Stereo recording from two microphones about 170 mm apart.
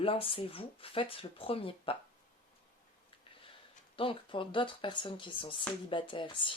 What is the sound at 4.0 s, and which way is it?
Speech, 30° left (ahead or behind).